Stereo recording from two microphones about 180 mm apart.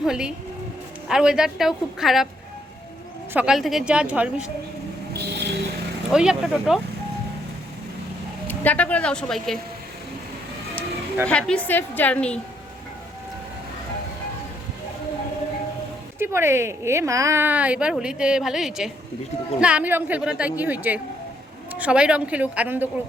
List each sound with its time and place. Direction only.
0.0 s a woman's voice: 5° right (ahead or behind)
3.3 s a woman's voice: 5° right (ahead or behind)
5.1 s music: 65° right (ahead or behind)
6.1 s a woman's voice: 5° right (ahead or behind)
8.4 s a woman's voice: 10° left (ahead or behind)
11.3 s a woman's voice: 5° left (ahead or behind)
16.1 s speech: 15° right (ahead or behind)